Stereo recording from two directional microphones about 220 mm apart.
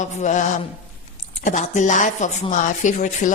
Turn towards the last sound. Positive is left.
turn(degrees=35)  # may be behind; listen again after turning